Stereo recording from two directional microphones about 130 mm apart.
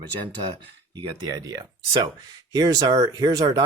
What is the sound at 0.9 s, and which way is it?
Speech, 30° right (ahead or behind).